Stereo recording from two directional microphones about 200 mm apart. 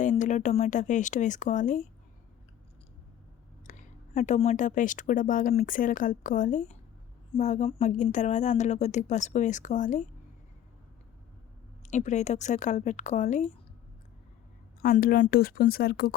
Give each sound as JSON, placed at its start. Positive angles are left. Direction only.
{"t": 0.0, "sound": "speech", "side_deg": 40}
{"t": 3.7, "sound": "speech", "side_deg": 40}
{"t": 11.8, "sound": "speech", "side_deg": 35}
{"t": 14.8, "sound": "speech", "side_deg": 45}